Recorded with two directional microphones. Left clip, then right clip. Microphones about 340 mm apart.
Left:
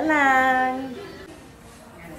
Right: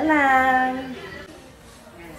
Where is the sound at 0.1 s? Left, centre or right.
Centre.